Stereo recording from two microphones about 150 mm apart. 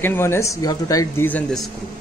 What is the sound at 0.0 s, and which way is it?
Speech, 15° left (ahead or behind).